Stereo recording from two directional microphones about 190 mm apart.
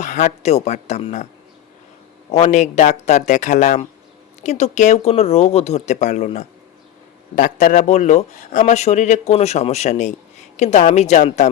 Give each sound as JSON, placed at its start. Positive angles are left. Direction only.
{"t": 0.0, "sound": "speech", "side_deg": 40}
{"t": 2.3, "sound": "speech", "side_deg": 35}